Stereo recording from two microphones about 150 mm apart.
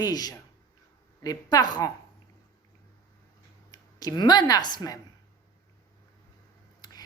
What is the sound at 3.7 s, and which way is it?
Speech, 25° left (ahead or behind).